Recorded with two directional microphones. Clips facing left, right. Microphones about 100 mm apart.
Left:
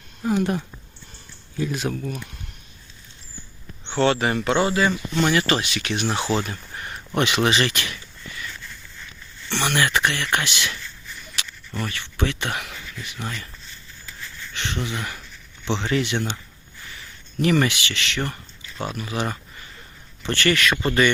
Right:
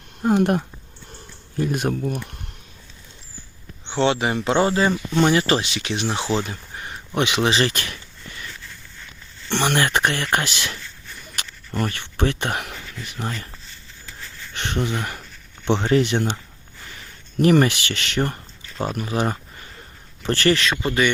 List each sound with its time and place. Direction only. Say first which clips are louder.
0.2 s speech: right 4 dB; 55° right (ahead or behind)
3.8 s speech: even; 20° right (ahead or behind)
4.4 s speech: right 3 dB; 30° right (ahead or behind)
7.5 s speech: right 1 dB; 35° right (ahead or behind)
9.6 s speech: right 2 dB; 35° right (ahead or behind)
14.5 s speech: right 4 dB; 45° right (ahead or behind)
17.4 s speech: right 4 dB; 40° right (ahead or behind)
20.8 s speech: left 1 dB; 10° right (ahead or behind)